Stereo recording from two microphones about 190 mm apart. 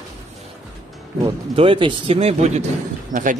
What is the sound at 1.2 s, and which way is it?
Speech, 30° right (ahead or behind).